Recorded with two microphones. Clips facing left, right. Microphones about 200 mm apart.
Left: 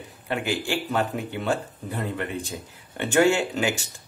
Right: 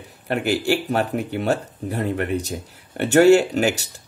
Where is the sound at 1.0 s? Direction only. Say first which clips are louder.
Right 4 dB; 65° right (ahead or behind).